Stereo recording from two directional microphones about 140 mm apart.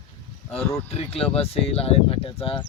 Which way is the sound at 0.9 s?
45° left (ahead or behind).